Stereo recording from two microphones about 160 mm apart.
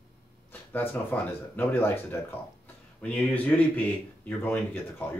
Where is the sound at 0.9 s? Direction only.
10° left (ahead or behind).